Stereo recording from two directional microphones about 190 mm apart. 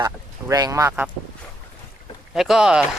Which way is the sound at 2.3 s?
Centre (ahead or behind).